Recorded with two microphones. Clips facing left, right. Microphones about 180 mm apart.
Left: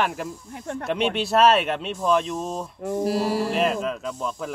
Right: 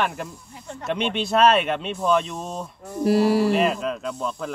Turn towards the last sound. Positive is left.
turn(degrees=0)  # may be behind; listen again after turning